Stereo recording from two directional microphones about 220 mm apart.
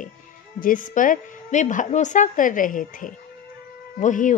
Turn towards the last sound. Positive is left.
turn(degrees=35)  # may be behind; listen again after turning